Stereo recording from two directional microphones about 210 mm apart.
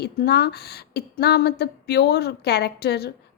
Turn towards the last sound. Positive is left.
turn(degrees=50)  # may be behind; listen again after turning